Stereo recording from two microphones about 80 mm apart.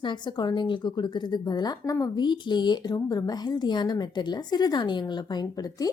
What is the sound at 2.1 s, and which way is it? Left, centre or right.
A woman's voice, left.